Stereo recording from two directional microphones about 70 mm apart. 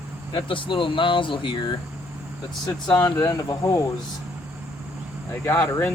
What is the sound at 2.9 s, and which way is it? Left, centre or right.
Speech, left.